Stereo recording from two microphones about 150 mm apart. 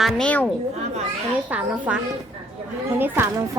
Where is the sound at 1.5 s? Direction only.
10° right (ahead or behind).